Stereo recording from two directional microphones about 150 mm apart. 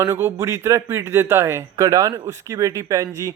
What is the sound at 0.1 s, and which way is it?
A man's voice, 10° right (ahead or behind).